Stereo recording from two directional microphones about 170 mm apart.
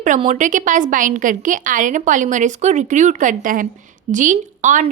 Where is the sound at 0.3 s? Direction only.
50° right (ahead or behind).